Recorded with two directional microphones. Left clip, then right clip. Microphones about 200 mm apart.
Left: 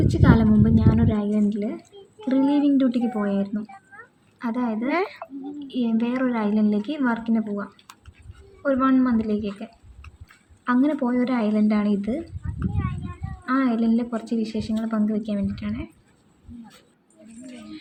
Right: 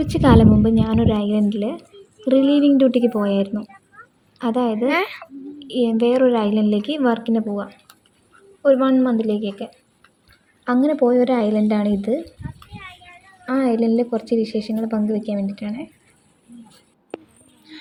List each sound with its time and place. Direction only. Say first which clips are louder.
0.0 s a woman's voice: right 6 dB; 35° right (ahead or behind)
4.9 s speech: right 4 dB; 5° left (ahead or behind)
5.6 s a woman's voice: right 9 dB; 25° right (ahead or behind)
10.7 s a woman's voice: right 6 dB; 20° right (ahead or behind)
13.4 s a woman's voice: right 4 dB; 20° right (ahead or behind)